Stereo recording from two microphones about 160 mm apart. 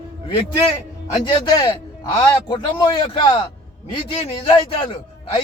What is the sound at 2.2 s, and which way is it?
A man's voice, 25° left (ahead or behind).